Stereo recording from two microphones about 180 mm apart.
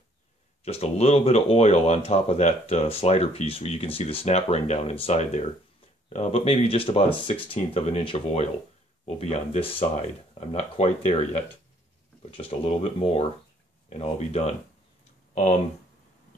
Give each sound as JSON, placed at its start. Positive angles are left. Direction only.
{"t": 0.7, "sound": "speech", "side_deg": 35}